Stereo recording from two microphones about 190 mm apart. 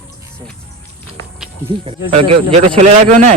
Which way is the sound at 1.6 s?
30° right (ahead or behind).